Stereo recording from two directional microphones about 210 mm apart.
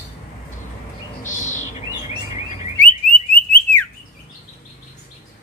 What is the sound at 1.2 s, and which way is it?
Bird, 35° left (ahead or behind).